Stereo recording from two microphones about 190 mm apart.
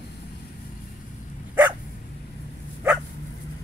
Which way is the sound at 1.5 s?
5° right (ahead or behind).